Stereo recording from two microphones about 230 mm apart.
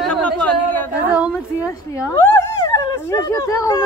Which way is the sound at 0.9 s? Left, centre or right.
Centre.